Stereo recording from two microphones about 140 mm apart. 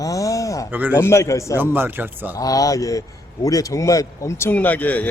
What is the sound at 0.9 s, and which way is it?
Speech, 20° left (ahead or behind).